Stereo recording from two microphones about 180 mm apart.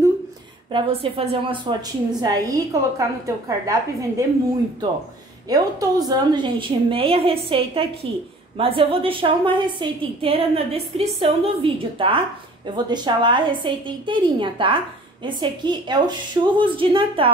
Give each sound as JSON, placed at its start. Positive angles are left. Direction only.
{"t": 0.7, "sound": "a woman's voice", "side_deg": -30}
{"t": 5.5, "sound": "a woman's voice", "side_deg": -20}